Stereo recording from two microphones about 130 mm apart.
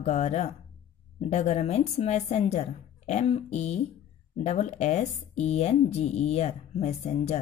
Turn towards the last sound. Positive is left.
turn(degrees=55)  # may be behind; listen again after turning